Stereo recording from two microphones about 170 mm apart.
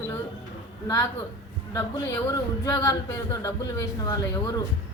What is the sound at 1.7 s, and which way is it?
A man's voice, 20° left (ahead or behind).